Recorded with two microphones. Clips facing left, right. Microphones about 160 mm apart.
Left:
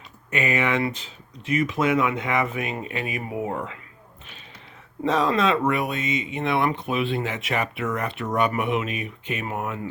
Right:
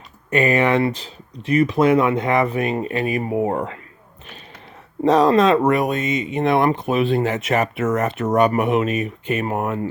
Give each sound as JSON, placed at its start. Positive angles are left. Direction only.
{"t": 0.3, "sound": "speech", "side_deg": -35}
{"t": 5.0, "sound": "speech", "side_deg": -40}